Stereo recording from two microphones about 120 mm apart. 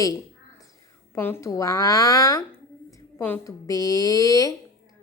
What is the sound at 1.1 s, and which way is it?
Speech, 20° left (ahead or behind).